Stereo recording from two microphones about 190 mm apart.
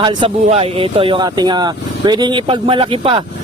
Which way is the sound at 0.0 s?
25° right (ahead or behind).